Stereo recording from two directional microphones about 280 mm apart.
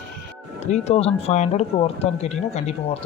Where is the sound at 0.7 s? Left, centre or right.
Left.